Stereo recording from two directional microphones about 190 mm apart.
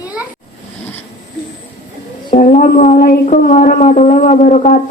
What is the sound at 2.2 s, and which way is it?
Speech, 45° left (ahead or behind).